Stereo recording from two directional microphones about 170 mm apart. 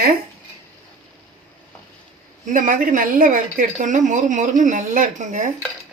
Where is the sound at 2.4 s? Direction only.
50° right (ahead or behind).